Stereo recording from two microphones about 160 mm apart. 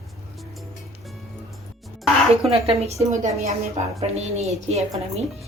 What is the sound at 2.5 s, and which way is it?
Speech, 40° right (ahead or behind).